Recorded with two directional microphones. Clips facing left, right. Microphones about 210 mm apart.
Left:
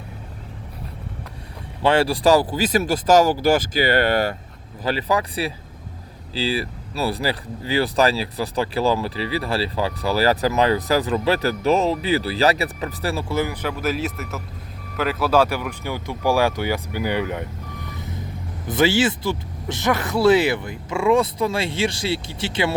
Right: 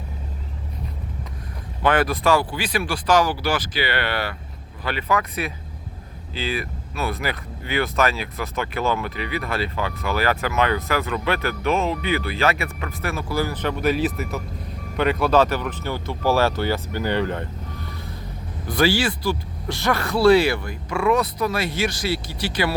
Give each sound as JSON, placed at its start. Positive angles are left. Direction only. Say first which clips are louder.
{"t": 1.8, "sound": "speech", "louder": "left 2 dB", "side_deg": 30}
{"t": 13.5, "sound": "speech", "louder": "right 2 dB", "side_deg": 10}